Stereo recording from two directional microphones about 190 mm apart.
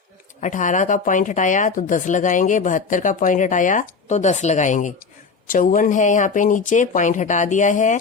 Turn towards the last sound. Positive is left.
turn(degrees=40)  # may be behind; listen again after turning